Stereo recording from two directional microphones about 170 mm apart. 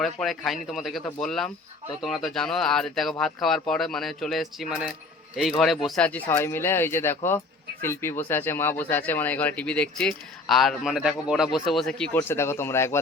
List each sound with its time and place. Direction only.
0.0 s speech: centre (ahead or behind)
12.1 s speech: 15° left (ahead or behind)